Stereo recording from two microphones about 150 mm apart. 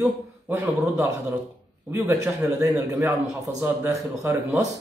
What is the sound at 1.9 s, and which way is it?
A man's voice, 15° right (ahead or behind).